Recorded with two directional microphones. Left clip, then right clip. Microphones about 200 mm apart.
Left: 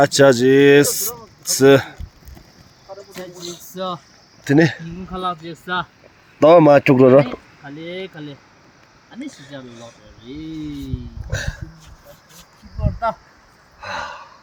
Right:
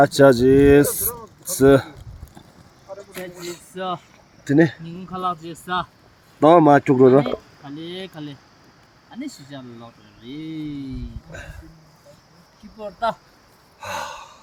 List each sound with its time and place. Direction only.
0.0 s speech: centre (ahead or behind)
2.9 s a sound: 5° right (ahead or behind)
3.8 s speech: 60° left (ahead or behind)
4.4 s speech: 20° left (ahead or behind)
6.9 s speech: 35° left (ahead or behind)
7.6 s speech: centre (ahead or behind); by 10.6 s 20° right (ahead or behind)
11.3 s speech: 45° left (ahead or behind)
12.8 s speech: 25° right (ahead or behind)
13.8 s gasp: 5° left (ahead or behind)